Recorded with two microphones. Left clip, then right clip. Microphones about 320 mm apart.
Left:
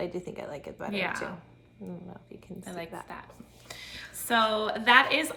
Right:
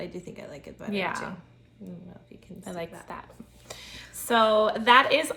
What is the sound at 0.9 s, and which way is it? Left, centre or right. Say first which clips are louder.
Speech: right 2 dB; centre.